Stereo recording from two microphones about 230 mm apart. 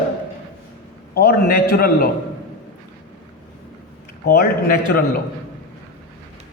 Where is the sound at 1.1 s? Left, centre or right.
Left.